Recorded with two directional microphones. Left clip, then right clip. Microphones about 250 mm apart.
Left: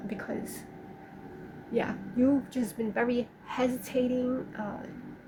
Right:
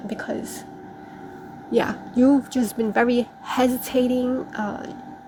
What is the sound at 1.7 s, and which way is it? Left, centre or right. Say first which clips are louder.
A woman's voice: right 9 dB; right.